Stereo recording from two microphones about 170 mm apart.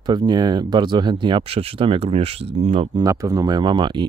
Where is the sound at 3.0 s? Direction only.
20° right (ahead or behind).